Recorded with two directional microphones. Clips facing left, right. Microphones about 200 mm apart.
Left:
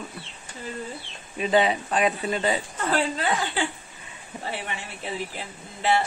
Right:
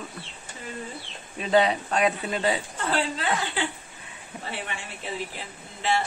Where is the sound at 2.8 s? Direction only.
45° left (ahead or behind).